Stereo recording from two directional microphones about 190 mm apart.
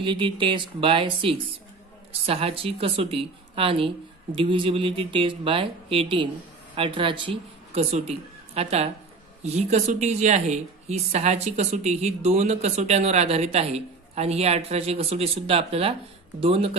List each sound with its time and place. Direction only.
0.0 s a woman's voice: 25° right (ahead or behind)